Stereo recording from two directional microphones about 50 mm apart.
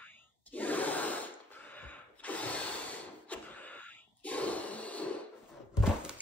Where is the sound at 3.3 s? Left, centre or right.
Left.